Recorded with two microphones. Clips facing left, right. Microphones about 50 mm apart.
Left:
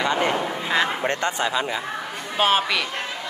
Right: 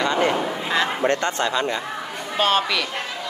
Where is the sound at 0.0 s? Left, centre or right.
Centre.